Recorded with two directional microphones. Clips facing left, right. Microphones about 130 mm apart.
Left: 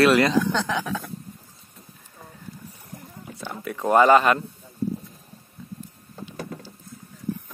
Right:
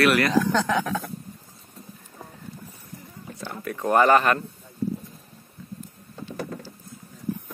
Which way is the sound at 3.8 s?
15° left (ahead or behind).